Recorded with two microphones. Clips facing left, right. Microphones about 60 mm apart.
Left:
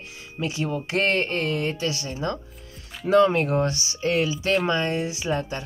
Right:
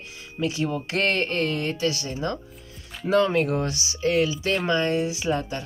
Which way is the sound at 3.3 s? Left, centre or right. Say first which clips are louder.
Left 1 dB; left.